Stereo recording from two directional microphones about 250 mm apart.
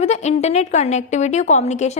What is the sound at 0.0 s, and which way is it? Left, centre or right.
A woman's voice, left.